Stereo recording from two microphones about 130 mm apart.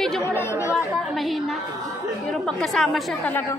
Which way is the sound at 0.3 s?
20° left (ahead or behind).